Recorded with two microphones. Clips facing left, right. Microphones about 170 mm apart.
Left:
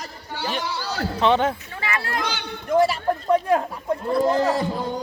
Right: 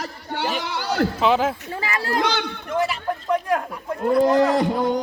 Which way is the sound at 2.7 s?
35° left (ahead or behind).